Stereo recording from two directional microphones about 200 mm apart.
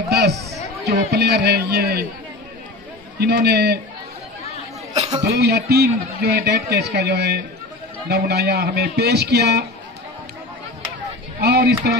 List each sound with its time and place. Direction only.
0.1 s a sound: 55° right (ahead or behind)
0.8 s speech: 55° right (ahead or behind)
3.2 s speech: 55° right (ahead or behind)
4.9 s a man's voice: 35° right (ahead or behind)
5.3 s a man's voice: 55° right (ahead or behind)
11.4 s a man's voice: 55° right (ahead or behind)